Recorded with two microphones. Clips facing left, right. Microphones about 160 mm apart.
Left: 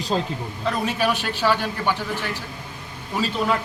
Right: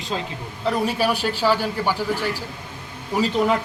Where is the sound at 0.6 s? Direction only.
10° right (ahead or behind).